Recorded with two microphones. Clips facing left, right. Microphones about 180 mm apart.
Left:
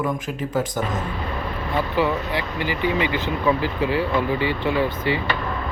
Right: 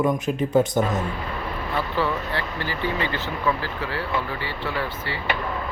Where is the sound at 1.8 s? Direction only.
15° left (ahead or behind).